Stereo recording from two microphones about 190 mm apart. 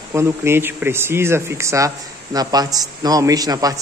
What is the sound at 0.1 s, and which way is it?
A man's voice, 15° right (ahead or behind).